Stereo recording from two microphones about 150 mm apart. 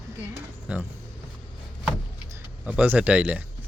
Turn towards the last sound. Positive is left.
turn(degrees=-10)  # may be behind; listen again after turning